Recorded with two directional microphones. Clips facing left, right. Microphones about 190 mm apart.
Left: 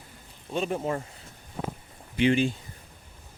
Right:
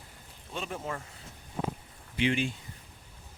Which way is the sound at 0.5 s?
25° left (ahead or behind).